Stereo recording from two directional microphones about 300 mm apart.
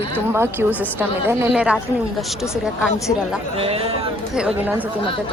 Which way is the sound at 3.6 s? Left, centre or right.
Centre.